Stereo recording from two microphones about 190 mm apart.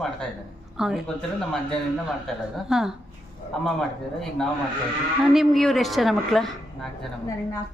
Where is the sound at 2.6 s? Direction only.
5° right (ahead or behind).